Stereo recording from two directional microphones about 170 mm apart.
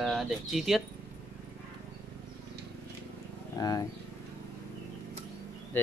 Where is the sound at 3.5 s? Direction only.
20° left (ahead or behind).